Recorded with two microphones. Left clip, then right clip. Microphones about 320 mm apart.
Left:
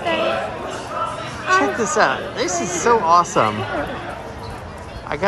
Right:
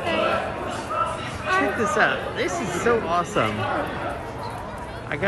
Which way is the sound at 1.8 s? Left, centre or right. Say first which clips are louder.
Left 3 dB; centre.